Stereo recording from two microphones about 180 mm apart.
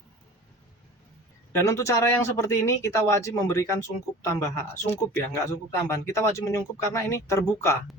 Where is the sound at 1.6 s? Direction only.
15° left (ahead or behind).